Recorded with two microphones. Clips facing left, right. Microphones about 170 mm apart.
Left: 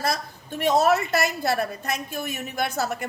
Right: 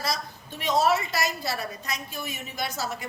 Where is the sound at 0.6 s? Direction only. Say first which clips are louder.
Left 4 dB; 50° left (ahead or behind).